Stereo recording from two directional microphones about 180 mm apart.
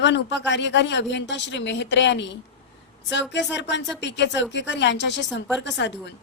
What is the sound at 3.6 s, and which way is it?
A woman's voice, 80° left.